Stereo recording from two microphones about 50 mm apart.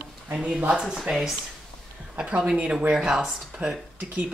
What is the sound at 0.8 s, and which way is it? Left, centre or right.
Speech, centre.